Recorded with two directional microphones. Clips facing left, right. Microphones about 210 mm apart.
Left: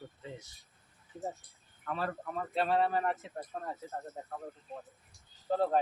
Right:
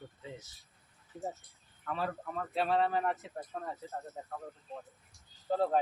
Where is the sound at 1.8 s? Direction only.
Centre (ahead or behind).